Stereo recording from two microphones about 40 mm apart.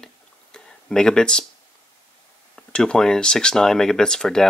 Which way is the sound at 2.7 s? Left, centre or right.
Left.